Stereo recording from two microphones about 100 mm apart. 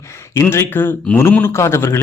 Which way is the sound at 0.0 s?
30° left (ahead or behind).